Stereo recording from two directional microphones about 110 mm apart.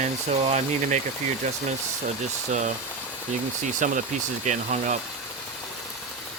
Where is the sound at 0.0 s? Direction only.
90° right.